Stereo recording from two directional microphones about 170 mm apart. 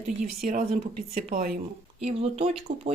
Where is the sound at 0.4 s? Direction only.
45° right (ahead or behind).